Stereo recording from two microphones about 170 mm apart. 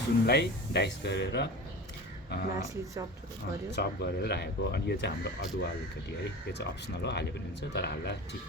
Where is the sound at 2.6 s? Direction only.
20° right (ahead or behind).